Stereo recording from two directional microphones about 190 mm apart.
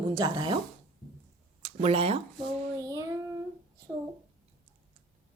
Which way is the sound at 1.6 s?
30° right (ahead or behind).